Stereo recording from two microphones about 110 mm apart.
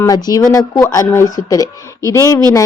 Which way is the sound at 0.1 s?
35° left (ahead or behind).